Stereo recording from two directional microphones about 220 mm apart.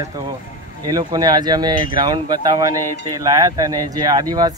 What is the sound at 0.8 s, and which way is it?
Speech, 15° right (ahead or behind).